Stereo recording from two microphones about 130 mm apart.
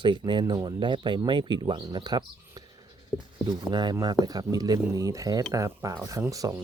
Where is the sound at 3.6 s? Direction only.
35° right (ahead or behind).